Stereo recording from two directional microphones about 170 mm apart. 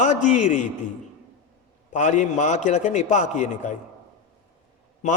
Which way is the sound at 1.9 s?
45° left (ahead or behind).